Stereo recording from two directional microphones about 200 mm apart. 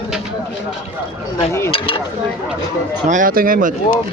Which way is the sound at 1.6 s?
30° left (ahead or behind).